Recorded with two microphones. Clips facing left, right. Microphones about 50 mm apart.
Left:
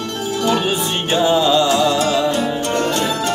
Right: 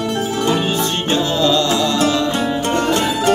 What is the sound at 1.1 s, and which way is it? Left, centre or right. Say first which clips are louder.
Music: left 3 dB; centre.